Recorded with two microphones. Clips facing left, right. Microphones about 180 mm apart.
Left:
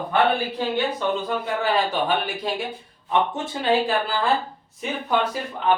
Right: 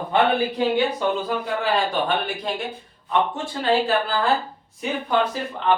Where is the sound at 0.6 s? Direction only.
15° right (ahead or behind).